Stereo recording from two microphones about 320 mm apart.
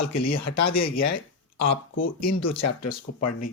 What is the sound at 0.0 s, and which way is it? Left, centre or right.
Speech, left.